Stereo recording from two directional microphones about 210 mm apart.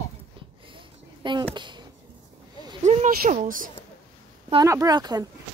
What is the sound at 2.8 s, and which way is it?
Speech, 35° right (ahead or behind).